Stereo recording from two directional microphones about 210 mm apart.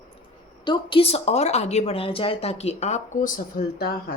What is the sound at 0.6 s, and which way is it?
A woman's voice, 25° left (ahead or behind).